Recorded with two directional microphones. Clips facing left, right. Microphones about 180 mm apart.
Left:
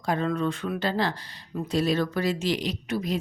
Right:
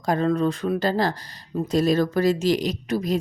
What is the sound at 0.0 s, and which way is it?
Speech, 40° right (ahead or behind).